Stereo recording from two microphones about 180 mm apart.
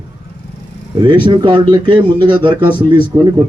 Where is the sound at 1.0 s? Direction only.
25° right (ahead or behind).